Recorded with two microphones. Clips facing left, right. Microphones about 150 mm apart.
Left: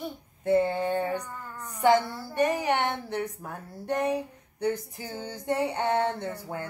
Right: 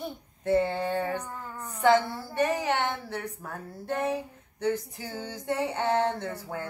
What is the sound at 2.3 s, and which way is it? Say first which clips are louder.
Female singing: left 2 dB; 15° left (ahead or behind).